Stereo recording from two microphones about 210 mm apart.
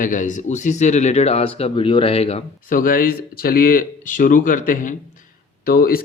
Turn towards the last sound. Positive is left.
turn(degrees=45)  # may be behind; listen again after turning